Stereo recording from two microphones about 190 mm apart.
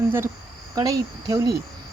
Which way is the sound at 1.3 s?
20° right (ahead or behind).